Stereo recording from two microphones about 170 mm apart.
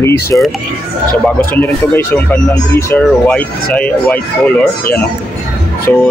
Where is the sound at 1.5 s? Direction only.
10° left (ahead or behind).